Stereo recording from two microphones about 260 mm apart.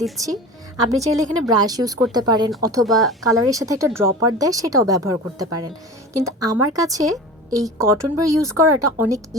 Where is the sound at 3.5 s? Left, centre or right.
Centre.